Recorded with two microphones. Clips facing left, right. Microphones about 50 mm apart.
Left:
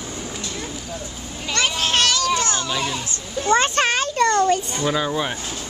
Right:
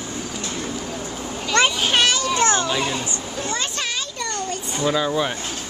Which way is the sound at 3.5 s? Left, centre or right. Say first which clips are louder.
Left 11 dB; left.